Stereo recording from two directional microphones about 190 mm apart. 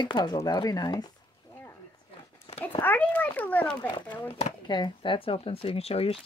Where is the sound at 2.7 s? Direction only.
10° left (ahead or behind).